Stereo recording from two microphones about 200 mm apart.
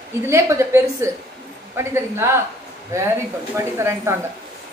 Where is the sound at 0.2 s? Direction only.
15° right (ahead or behind).